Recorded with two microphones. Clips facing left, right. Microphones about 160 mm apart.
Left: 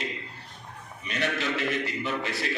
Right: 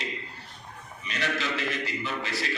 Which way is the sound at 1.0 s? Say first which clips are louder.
Left 2 dB; 55° left (ahead or behind).